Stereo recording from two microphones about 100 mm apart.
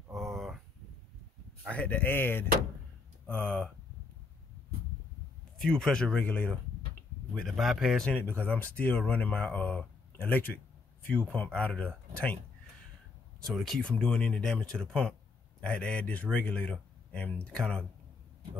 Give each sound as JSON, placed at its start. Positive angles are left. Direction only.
{"t": 0.1, "sound": "a sound", "side_deg": 0}
{"t": 1.7, "sound": "speech", "side_deg": 15}
{"t": 5.6, "sound": "speech", "side_deg": 5}
{"t": 7.3, "sound": "speech", "side_deg": 0}
{"t": 8.1, "sound": "speech", "side_deg": 15}
{"t": 13.4, "sound": "speech", "side_deg": 0}